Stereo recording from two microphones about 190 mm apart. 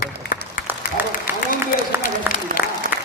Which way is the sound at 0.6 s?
45° left (ahead or behind).